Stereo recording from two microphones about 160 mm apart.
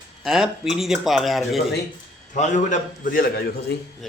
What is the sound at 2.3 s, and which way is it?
A man's voice, 50° left (ahead or behind).